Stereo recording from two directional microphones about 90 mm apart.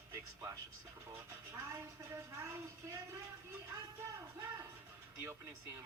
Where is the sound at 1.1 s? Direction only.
30° right (ahead or behind).